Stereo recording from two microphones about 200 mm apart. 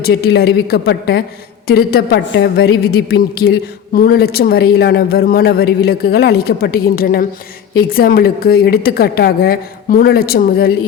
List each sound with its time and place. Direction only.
0.0 s a woman's voice: 50° left (ahead or behind)